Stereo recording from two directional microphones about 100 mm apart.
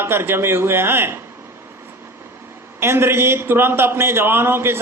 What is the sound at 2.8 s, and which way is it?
Speech, 25° right (ahead or behind).